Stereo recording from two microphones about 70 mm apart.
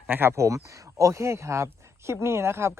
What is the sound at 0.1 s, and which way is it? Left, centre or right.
Speech, right.